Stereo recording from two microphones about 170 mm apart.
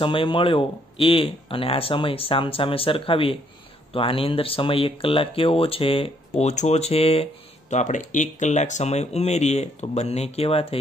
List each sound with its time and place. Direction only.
0.0 s speech: 30° left (ahead or behind)